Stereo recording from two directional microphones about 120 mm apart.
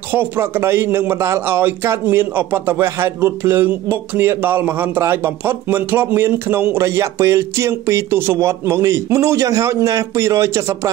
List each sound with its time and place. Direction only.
0.1 s a man's voice: 15° right (ahead or behind)